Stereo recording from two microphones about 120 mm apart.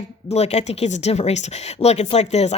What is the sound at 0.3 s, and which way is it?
Speech, 65° left (ahead or behind).